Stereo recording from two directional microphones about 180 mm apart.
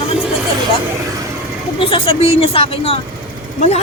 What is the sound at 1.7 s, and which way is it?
Speech, 30° left (ahead or behind).